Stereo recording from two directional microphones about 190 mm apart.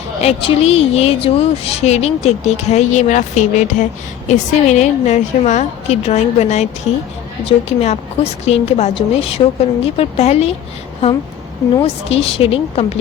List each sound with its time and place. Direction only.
0.2 s speech: 30° left (ahead or behind)
11.8 s speech: 30° left (ahead or behind)